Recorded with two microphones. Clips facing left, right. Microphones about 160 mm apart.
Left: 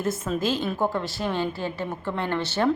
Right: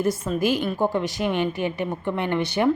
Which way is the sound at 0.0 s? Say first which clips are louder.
Right 3 dB; 10° right (ahead or behind).